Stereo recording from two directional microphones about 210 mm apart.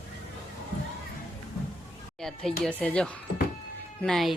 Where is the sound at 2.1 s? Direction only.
Centre (ahead or behind).